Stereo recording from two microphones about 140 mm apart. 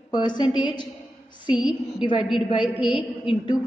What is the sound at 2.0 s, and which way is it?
A woman's voice, 35° left (ahead or behind).